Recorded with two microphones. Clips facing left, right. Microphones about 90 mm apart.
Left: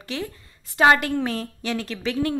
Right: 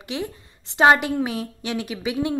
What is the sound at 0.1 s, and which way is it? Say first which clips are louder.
A woman's voice: right 2 dB; 15° right (ahead or behind).